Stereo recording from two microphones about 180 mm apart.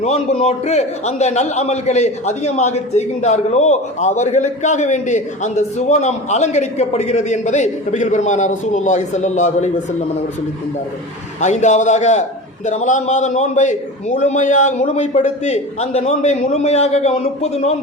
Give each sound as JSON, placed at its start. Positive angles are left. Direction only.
{"t": 0.0, "sound": "a man's voice", "side_deg": 35}
{"t": 11.3, "sound": "a man's voice", "side_deg": 40}